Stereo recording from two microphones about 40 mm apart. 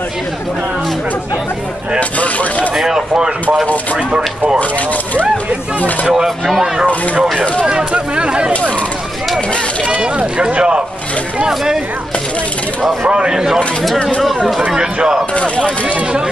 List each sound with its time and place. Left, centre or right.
2.0 s mechanisms: left
2.7 s a sound: centre
3.6 s a sound: left
6.2 s speech: centre
7.9 s a sound: right
9.8 s speech: right
11.4 s speech: centre
13.0 s speech: right
15.0 s speech: centre
15.3 s speech: left